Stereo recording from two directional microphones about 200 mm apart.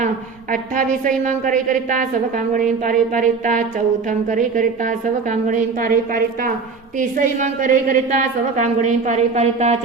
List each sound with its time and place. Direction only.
0.5 s a woman's voice: 40° right (ahead or behind)